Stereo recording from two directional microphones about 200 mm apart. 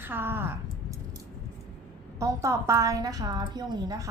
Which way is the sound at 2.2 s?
15° right (ahead or behind).